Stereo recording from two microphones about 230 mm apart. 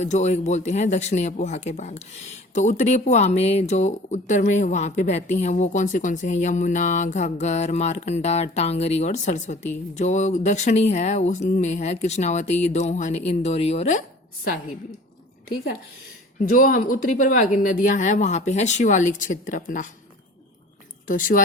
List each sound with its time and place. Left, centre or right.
0.0 s speech: left
16.4 s speech: left
21.1 s speech: left